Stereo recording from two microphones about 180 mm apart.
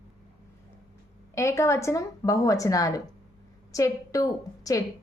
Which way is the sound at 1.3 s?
15° left (ahead or behind).